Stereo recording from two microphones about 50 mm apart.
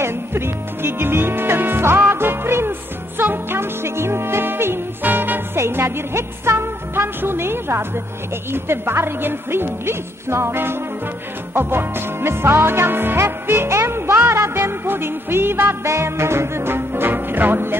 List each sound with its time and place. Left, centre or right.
0.0 s music: right
3.8 s music: right
5.6 s speech: right
13.5 s speech: right
15.8 s speech: right